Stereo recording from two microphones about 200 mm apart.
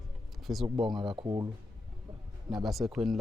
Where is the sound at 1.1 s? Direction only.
20° right (ahead or behind).